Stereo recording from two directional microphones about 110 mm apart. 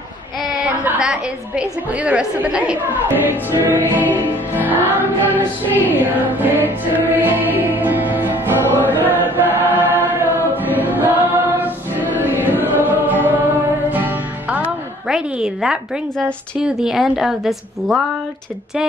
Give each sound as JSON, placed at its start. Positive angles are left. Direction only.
{"t": 0.8, "sound": "a woman's voice", "side_deg": -10}
{"t": 4.8, "sound": "music", "side_deg": -15}
{"t": 8.8, "sound": "choir", "side_deg": -15}
{"t": 12.2, "sound": "music", "side_deg": -15}
{"t": 15.0, "sound": "a woman's voice", "side_deg": -5}